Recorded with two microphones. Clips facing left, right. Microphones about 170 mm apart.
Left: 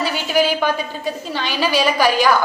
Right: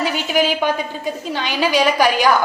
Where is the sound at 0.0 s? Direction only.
15° right (ahead or behind).